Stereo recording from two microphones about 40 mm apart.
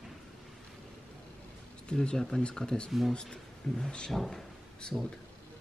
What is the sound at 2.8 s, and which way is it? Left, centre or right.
Speech, centre.